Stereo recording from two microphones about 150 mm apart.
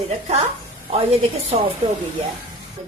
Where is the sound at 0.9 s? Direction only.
40° right (ahead or behind).